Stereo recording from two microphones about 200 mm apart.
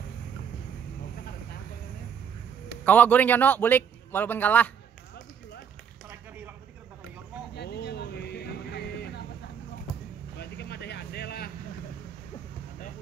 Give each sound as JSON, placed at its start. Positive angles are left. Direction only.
{"t": 2.8, "sound": "speech", "side_deg": 10}
{"t": 7.5, "sound": "a sound", "side_deg": 55}
{"t": 10.3, "sound": "vehicle", "side_deg": 55}